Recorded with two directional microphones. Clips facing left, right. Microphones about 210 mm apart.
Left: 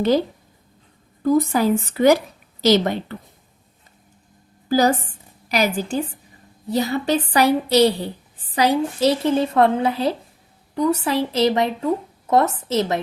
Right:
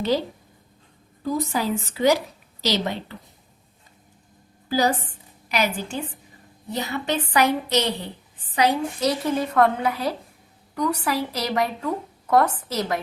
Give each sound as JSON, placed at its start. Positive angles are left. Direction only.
{"t": 1.2, "sound": "a woman's voice", "side_deg": 50}
{"t": 5.5, "sound": "a woman's voice", "side_deg": 40}